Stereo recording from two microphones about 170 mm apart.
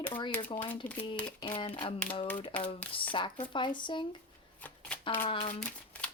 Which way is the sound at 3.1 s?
30° left (ahead or behind).